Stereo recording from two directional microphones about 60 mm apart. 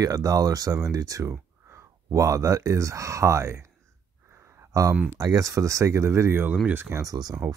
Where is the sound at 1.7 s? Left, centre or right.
Right.